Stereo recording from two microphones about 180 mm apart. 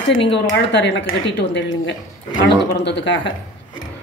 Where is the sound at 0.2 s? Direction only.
75° left (ahead or behind).